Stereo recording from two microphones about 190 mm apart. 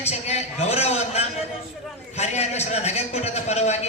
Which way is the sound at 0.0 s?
35° left (ahead or behind).